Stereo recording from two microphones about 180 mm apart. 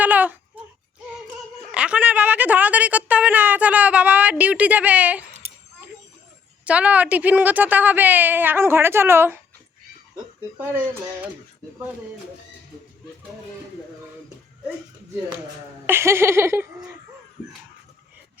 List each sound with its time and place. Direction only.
0.0 s baby cry: 10° right (ahead or behind)
1.7 s a woman's voice: 5° right (ahead or behind)
5.4 s a sound: 35° right (ahead or behind)
6.7 s a woman's voice: 5° right (ahead or behind)
10.6 s a woman's voice: 10° right (ahead or behind)
15.9 s a woman's voice: 15° right (ahead or behind)